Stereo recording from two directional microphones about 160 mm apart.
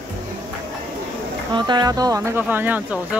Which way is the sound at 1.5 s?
30° right (ahead or behind).